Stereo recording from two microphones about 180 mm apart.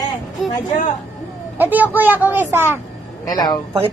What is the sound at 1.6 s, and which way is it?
A child's voice, 10° right (ahead or behind).